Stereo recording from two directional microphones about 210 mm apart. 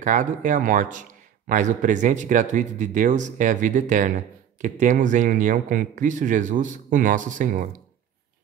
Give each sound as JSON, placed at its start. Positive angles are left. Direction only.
{"t": 0.0, "sound": "speech", "side_deg": -35}